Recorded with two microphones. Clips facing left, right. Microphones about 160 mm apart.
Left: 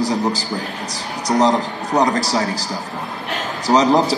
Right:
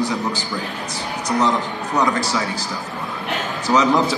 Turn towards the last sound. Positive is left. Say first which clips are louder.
# left 2 dB
turn(degrees=35)  # may be behind; listen again after turning